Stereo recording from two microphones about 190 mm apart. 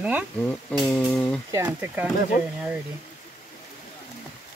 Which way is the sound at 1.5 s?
10° right (ahead or behind).